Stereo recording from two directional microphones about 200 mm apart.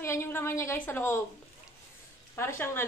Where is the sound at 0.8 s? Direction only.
10° left (ahead or behind).